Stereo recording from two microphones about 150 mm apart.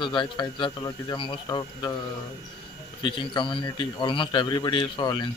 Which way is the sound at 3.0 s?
35° left (ahead or behind).